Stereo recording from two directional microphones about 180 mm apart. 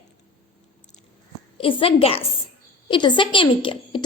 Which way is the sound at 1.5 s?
30° left (ahead or behind).